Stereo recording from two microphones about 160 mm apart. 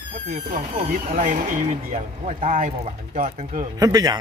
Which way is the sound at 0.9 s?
50° right (ahead or behind).